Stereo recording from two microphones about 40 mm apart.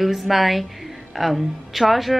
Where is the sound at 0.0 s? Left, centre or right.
Centre.